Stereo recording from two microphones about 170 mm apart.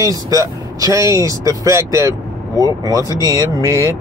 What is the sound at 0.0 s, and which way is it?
Speech, 20° right (ahead or behind).